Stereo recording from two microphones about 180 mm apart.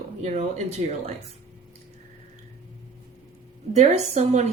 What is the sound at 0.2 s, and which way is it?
Speech, 40° right (ahead or behind).